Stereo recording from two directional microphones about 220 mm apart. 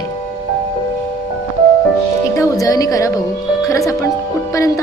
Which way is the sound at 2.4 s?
15° left (ahead or behind).